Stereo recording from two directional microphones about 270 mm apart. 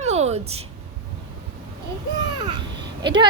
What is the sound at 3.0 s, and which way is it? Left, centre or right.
Speech, centre.